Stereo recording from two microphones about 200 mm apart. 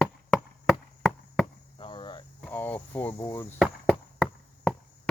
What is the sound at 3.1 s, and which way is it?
Speech, 15° left (ahead or behind).